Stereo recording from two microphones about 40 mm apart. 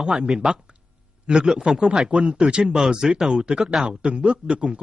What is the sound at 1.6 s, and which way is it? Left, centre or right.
A man's voice, centre.